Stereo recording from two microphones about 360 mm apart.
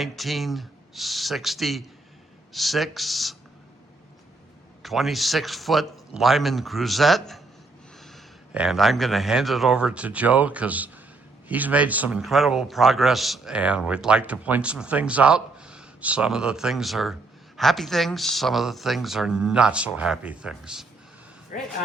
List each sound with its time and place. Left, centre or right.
0.0 s a man's voice: centre
4.8 s a man's voice: centre
21.5 s a man's voice: left